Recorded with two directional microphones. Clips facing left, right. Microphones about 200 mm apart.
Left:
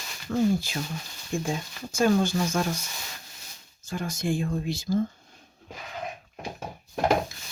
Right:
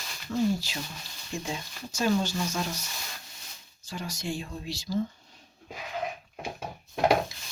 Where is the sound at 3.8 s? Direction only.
50° left (ahead or behind).